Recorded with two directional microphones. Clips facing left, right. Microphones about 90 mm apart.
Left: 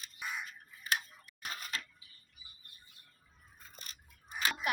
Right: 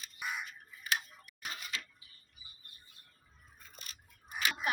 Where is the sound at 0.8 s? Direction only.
40° left (ahead or behind).